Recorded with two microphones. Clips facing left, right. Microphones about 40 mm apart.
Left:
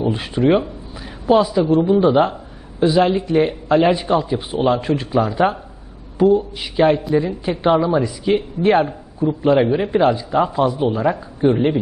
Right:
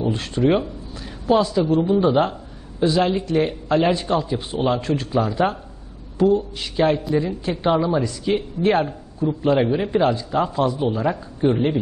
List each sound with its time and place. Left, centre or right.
0.0 s a woman's voice: centre